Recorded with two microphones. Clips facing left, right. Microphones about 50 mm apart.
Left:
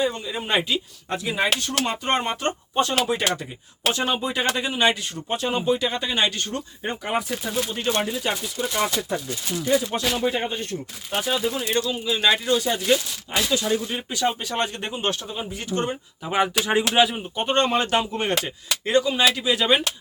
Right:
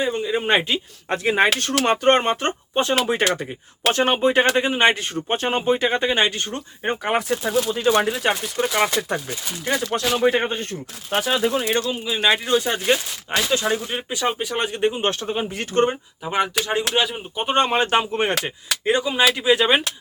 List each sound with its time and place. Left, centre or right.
0.0 s speech: right
2.4 s speech: right
3.8 s speech: right
7.0 s speech: right
8.1 s speech: right
10.2 s speech: right
11.1 s speech: right
11.9 s speech: centre
12.3 s speech: right
15.2 s speech: right
16.3 s speech: centre
17.3 s speech: centre